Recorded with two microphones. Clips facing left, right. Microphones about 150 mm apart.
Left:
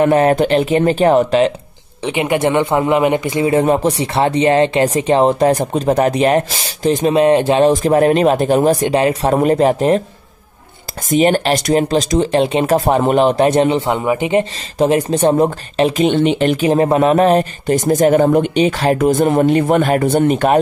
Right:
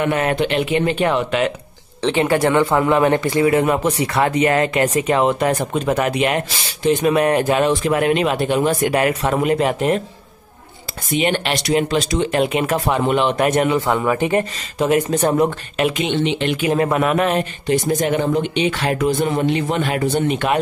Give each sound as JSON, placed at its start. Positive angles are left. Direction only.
{"t": 0.0, "sound": "speech", "side_deg": 40}
{"t": 2.0, "sound": "speech", "side_deg": 20}
{"t": 3.5, "sound": "speech", "side_deg": 35}
{"t": 7.7, "sound": "speech", "side_deg": 40}
{"t": 8.8, "sound": "speech", "side_deg": 25}
{"t": 9.3, "sound": "speech", "side_deg": 40}
{"t": 11.1, "sound": "speech", "side_deg": 40}
{"t": 14.8, "sound": "speech", "side_deg": 30}
{"t": 16.0, "sound": "speech", "side_deg": 45}